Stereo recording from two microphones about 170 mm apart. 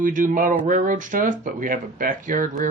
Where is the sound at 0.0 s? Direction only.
50° right (ahead or behind).